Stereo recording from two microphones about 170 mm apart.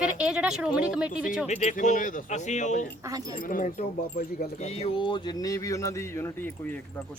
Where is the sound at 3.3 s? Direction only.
55° left (ahead or behind).